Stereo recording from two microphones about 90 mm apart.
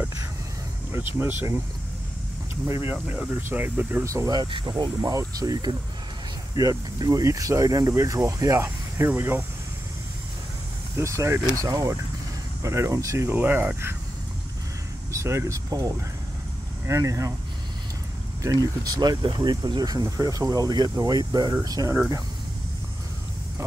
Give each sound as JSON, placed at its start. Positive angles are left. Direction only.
{"t": 0.9, "sound": "speech", "side_deg": -25}
{"t": 2.9, "sound": "speech", "side_deg": -20}
{"t": 4.0, "sound": "speech", "side_deg": -35}
{"t": 4.5, "sound": "speech", "side_deg": -70}
{"t": 5.0, "sound": "speech", "side_deg": -40}
{"t": 9.1, "sound": "speech", "side_deg": -25}
{"t": 11.0, "sound": "speech", "side_deg": -35}
{"t": 13.4, "sound": "speech", "side_deg": -20}
{"t": 15.0, "sound": "speech", "side_deg": -30}
{"t": 18.4, "sound": "speech", "side_deg": -40}